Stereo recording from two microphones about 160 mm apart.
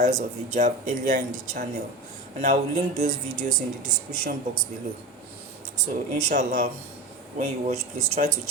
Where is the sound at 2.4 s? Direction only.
45° right (ahead or behind).